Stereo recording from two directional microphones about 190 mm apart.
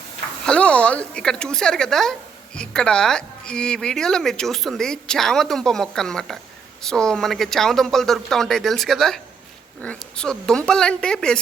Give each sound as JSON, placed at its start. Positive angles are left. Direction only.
{"t": 0.4, "sound": "speech", "side_deg": 5}